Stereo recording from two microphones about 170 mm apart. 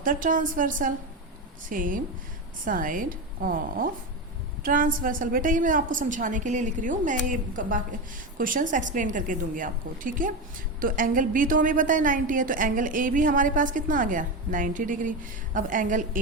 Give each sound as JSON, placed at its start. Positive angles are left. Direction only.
{"t": 0.0, "sound": "a woman's voice", "side_deg": -55}